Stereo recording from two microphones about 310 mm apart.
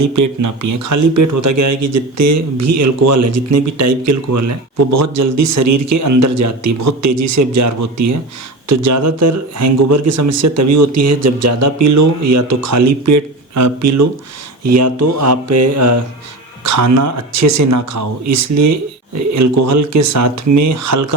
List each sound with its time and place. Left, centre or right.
0.0 s speech: right